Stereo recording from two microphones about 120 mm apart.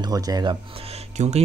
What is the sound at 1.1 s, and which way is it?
Speech, 70° right (ahead or behind).